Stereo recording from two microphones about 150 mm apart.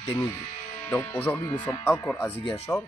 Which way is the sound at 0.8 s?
15° left (ahead or behind).